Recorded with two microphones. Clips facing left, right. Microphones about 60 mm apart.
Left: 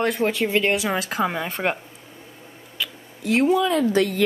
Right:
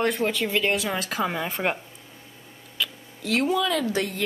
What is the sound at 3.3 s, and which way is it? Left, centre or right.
Speech, left.